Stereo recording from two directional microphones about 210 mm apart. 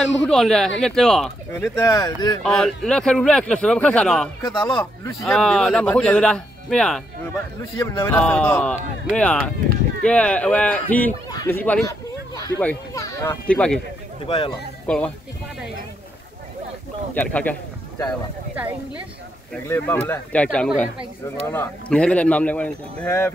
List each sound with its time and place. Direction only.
0.3 s a man's voice: centre (ahead or behind)
1.5 s speech: 15° left (ahead or behind)
2.4 s a man's voice: centre (ahead or behind)
14.2 s speech: 25° left (ahead or behind)
17.1 s a man's voice: 5° left (ahead or behind)
19.5 s a man's voice: 10° left (ahead or behind)